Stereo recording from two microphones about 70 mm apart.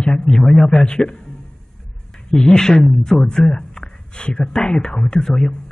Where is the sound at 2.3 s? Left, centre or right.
Centre.